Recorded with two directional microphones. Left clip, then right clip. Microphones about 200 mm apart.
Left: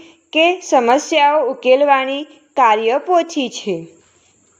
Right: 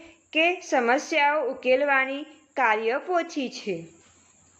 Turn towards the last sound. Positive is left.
turn(degrees=25)  # may be behind; listen again after turning